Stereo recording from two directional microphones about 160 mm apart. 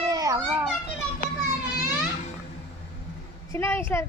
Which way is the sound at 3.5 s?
15° left (ahead or behind).